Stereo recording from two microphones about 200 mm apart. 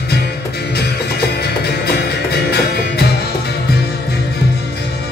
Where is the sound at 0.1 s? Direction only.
55° left (ahead or behind).